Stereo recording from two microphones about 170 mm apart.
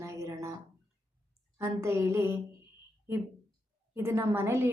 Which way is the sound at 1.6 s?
15° right (ahead or behind).